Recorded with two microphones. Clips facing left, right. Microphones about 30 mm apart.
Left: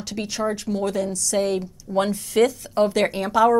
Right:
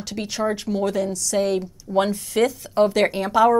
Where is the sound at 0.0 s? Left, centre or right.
Centre.